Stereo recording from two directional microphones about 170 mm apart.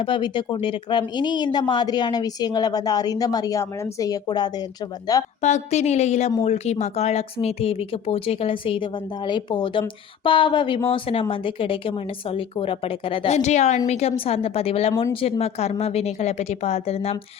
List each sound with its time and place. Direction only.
0.0 s speech: 30° left (ahead or behind)
5.4 s speech: 45° left (ahead or behind)